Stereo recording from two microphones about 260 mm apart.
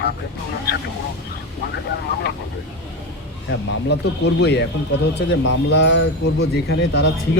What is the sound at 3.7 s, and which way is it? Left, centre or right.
Speech, left.